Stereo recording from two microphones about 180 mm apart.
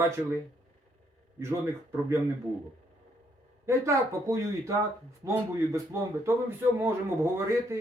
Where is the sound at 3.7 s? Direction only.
15° right (ahead or behind).